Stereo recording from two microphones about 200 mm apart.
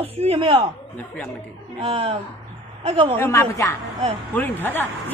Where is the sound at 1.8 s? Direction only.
25° right (ahead or behind).